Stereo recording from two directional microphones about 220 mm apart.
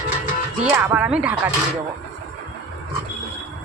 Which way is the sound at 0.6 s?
5° right (ahead or behind).